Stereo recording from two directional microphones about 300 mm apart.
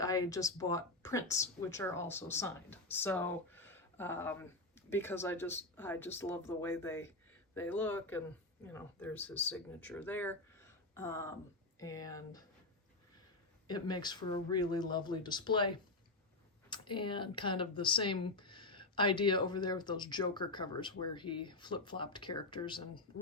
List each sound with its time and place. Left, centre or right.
0.0 s speech: centre
13.7 s speech: centre